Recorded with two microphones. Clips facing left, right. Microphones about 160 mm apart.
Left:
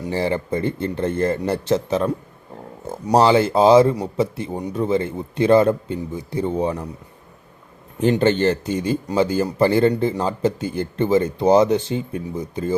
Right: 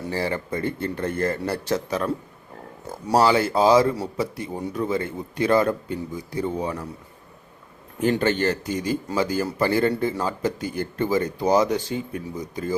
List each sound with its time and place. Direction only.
0.0 s speech: 20° left (ahead or behind)
8.0 s speech: 25° left (ahead or behind)